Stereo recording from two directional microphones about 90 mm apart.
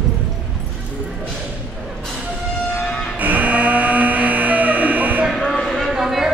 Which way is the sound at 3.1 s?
20° right (ahead or behind).